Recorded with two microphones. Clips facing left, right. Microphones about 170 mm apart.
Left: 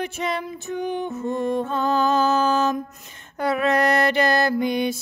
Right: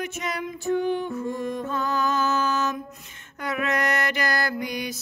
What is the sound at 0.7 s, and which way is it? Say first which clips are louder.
Music: right 2 dB; 20° left (ahead or behind).